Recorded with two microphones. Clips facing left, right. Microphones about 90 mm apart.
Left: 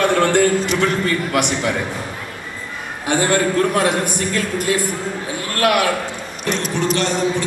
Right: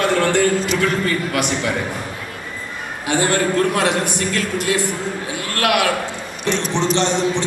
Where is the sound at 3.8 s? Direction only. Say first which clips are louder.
Left 1 dB; 50° left (ahead or behind).